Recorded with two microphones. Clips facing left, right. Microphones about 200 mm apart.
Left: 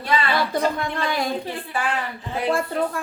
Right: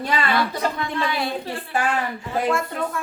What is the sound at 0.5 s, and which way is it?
Speech, 45° left (ahead or behind).